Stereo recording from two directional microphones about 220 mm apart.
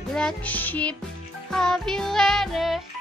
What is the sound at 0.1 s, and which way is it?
Music, 5° left (ahead or behind).